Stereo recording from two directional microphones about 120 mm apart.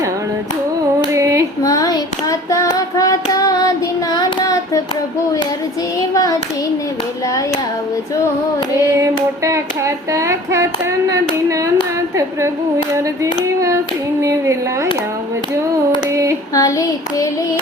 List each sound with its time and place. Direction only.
1.1 s child singing: 25° right (ahead or behind)
1.6 s child singing: 30° left (ahead or behind)
6.0 s clapping: 30° left (ahead or behind)
9.0 s child singing: 25° right (ahead or behind)
11.1 s a sound: 25° right (ahead or behind)
13.0 s child singing: 25° right (ahead or behind)
16.1 s child singing: 25° right (ahead or behind)
16.6 s child singing: 25° left (ahead or behind)